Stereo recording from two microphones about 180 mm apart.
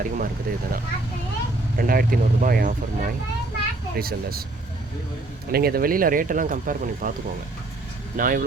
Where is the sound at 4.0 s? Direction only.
55° right (ahead or behind).